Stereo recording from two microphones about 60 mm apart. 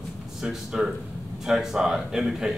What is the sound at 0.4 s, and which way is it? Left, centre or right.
Speech, centre.